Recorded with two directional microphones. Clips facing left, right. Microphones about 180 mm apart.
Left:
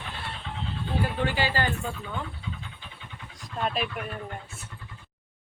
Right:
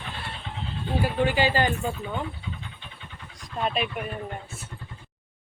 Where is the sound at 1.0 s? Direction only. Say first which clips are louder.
Right 6 dB; 15° right (ahead or behind).